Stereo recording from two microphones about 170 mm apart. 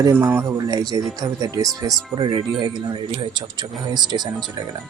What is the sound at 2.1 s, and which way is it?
Speech, 25° right (ahead or behind).